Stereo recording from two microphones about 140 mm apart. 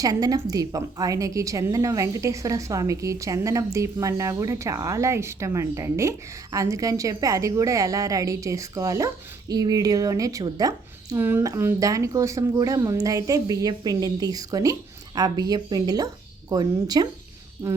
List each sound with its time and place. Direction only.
0.0 s a woman's voice: 25° right (ahead or behind)